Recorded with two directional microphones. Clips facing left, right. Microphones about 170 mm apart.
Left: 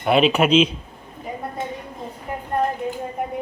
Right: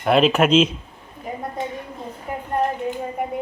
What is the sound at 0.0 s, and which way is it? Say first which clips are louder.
Speech: right 1 dB; centre (ahead or behind).